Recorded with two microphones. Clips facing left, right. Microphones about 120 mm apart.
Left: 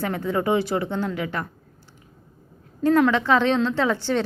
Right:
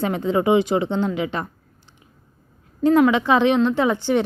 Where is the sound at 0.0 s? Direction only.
20° right (ahead or behind).